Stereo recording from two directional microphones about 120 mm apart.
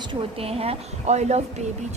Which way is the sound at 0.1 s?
55° right (ahead or behind).